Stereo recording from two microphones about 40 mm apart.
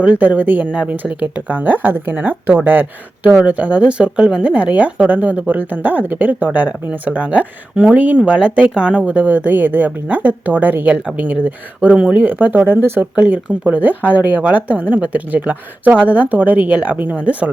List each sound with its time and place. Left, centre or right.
0.0 s a woman's voice: right
0.7 s a woman's voice: right
1.2 s a woman's voice: right
3.2 s a woman's voice: right
13.0 s a woman's voice: right